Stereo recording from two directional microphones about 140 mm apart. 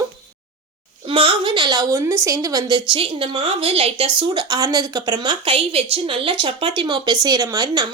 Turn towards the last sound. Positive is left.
turn(degrees=-30)  # may be behind; listen again after turning